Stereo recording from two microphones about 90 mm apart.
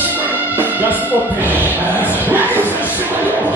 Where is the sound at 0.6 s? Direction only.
20° right (ahead or behind).